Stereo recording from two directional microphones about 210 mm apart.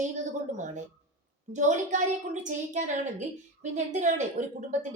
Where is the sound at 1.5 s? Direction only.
35° right (ahead or behind).